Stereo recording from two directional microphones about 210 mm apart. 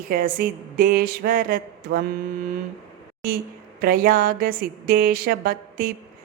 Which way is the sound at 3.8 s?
45° right (ahead or behind).